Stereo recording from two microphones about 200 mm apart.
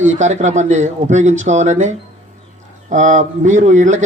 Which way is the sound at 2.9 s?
35° right (ahead or behind).